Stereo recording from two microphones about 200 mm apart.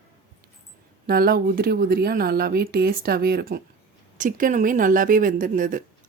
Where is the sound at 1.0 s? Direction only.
50° right (ahead or behind).